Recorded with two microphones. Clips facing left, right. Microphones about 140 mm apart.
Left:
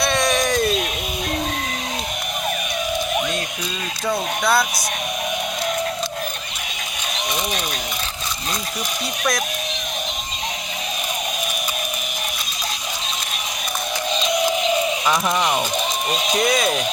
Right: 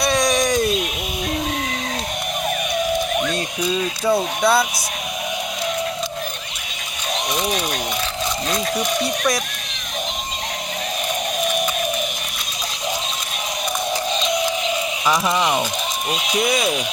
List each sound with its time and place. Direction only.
0.0 s a sound: 15° right (ahead or behind)
4.1 s speech: centre (ahead or behind)
15.0 s speech: centre (ahead or behind)